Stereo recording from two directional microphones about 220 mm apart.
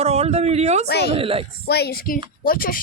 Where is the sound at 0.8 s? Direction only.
45° left (ahead or behind).